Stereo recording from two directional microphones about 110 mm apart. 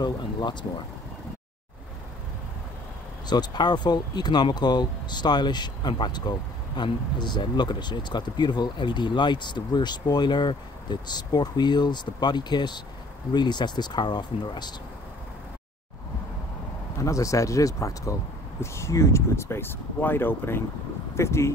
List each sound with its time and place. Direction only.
0.0 s speech: 40° left (ahead or behind)
3.3 s speech: 40° left (ahead or behind)
17.0 s speech: 30° left (ahead or behind)